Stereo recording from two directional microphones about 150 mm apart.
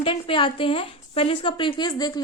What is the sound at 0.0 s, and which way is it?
A woman's voice, 35° left (ahead or behind).